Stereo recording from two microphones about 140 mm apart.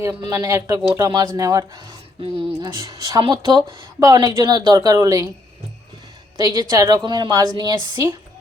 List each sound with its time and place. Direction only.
0.3 s a woman's voice: 20° right (ahead or behind)
2.7 s a woman's voice: 25° right (ahead or behind)
6.3 s a woman's voice: 25° right (ahead or behind)